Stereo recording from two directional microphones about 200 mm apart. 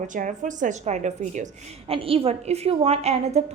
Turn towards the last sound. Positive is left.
turn(degrees=-30)  # may be behind; listen again after turning